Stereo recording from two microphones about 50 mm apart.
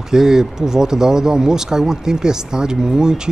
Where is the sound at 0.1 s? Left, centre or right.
Centre.